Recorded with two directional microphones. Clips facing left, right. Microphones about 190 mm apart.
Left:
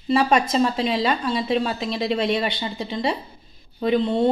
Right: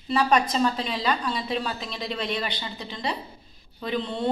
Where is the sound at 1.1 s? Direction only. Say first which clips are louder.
Left 5 dB; 45° left (ahead or behind).